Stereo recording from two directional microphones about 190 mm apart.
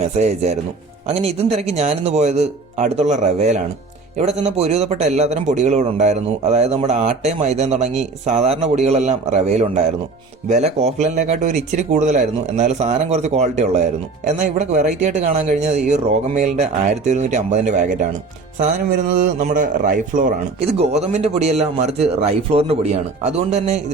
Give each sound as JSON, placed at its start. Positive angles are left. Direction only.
{"t": 0.2, "sound": "a man's voice", "side_deg": -35}
{"t": 19.1, "sound": "a man's voice", "side_deg": -40}